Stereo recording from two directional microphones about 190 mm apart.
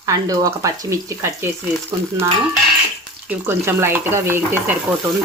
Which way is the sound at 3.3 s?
10° right (ahead or behind).